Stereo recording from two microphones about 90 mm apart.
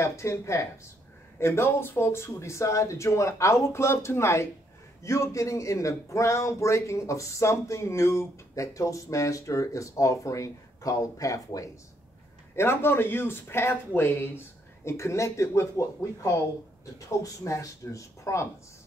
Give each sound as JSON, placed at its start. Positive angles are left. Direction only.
{"t": 0.0, "sound": "speech", "side_deg": 30}
{"t": 12.5, "sound": "speech", "side_deg": 25}